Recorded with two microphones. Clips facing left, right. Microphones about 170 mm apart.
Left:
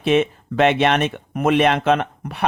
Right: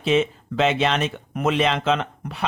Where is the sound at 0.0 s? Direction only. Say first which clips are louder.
Left 3 dB; 60° left (ahead or behind).